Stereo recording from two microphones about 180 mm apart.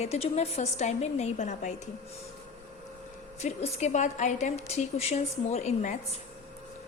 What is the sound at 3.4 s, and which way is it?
A woman's voice, 40° left (ahead or behind).